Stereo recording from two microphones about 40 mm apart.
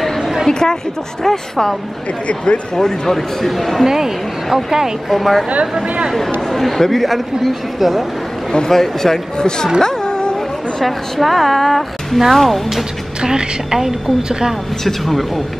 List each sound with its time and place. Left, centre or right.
0.2 s a sound: centre
0.5 s a woman's voice: centre
2.2 s speech: left
2.7 s speech: centre
3.8 s a woman's voice: centre
5.1 s a woman's voice: centre
6.5 s a woman's voice: centre
8.5 s speech: centre
9.8 s a sound: centre
10.8 s a woman's voice: centre
13.2 s a woman's voice: centre
14.9 s a woman's voice: centre